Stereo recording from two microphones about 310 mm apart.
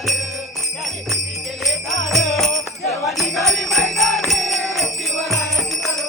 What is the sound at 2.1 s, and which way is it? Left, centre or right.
Music, centre.